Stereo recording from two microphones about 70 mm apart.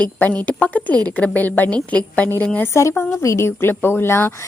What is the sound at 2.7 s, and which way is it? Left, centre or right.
A woman's voice, left.